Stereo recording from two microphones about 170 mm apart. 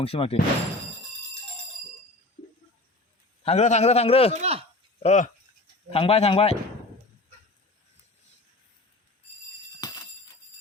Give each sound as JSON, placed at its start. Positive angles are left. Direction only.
{"t": 0.0, "sound": "a man's voice", "side_deg": 35}
{"t": 3.4, "sound": "a man's voice", "side_deg": 40}
{"t": 4.4, "sound": "speech", "side_deg": -35}
{"t": 5.0, "sound": "a man's voice", "side_deg": 45}
{"t": 9.8, "sound": "a sound", "side_deg": 25}